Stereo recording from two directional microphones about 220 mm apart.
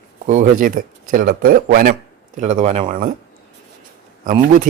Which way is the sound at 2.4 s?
30° right (ahead or behind).